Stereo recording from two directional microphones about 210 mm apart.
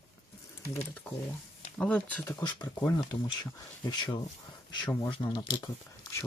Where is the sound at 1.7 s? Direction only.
5° left (ahead or behind).